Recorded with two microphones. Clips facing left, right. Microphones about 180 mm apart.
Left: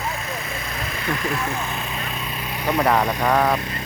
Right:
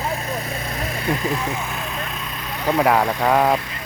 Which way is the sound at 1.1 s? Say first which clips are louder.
Right 3 dB; 15° right (ahead or behind).